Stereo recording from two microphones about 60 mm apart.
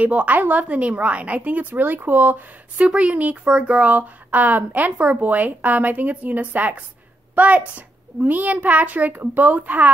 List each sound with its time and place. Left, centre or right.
0.0 s a child's voice: right
2.8 s a child's voice: centre